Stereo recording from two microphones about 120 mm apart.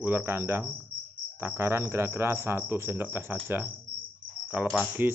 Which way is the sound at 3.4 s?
15° right (ahead or behind).